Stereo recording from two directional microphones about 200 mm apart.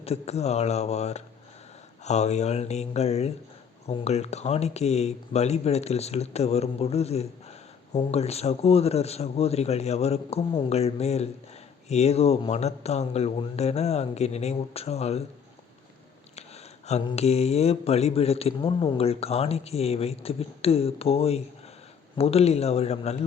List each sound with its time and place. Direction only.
0.0 s speech: 30° left (ahead or behind)
16.8 s speech: 30° left (ahead or behind)